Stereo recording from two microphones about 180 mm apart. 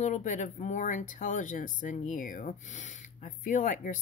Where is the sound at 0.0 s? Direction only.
45° left (ahead or behind).